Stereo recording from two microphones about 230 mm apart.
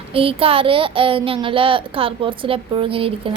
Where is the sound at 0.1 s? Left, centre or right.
Right.